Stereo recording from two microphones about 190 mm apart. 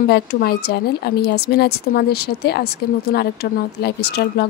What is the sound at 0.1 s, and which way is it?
A woman's voice, 55° left (ahead or behind).